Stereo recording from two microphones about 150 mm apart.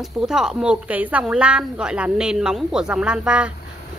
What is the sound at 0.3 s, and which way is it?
A woman's voice, 5° right (ahead or behind).